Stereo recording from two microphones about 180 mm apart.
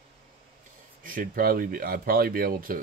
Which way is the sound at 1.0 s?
50° right (ahead or behind).